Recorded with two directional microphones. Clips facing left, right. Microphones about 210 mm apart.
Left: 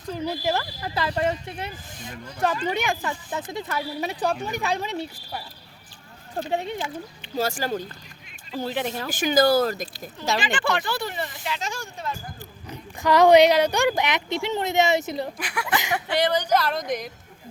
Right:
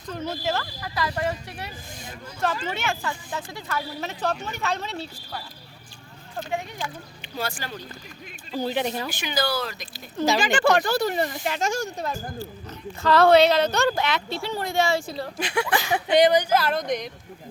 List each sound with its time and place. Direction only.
0.1 s speech: 15° left (ahead or behind)
6.3 s speech: 35° left (ahead or behind)
6.7 s speech: 20° left (ahead or behind)
7.3 s speech: 40° left (ahead or behind)
8.5 s speech: centre (ahead or behind)
9.1 s speech: 45° left (ahead or behind)
10.4 s speech: 45° right (ahead or behind)
12.4 s speech: 15° left (ahead or behind)
15.4 s speech: 25° right (ahead or behind); by 17.1 s centre (ahead or behind)